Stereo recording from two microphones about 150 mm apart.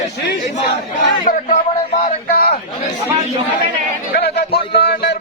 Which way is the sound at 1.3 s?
55° left (ahead or behind).